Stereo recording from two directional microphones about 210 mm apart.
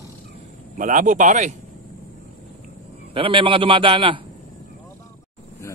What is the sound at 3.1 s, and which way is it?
A man's voice, 25° right (ahead or behind).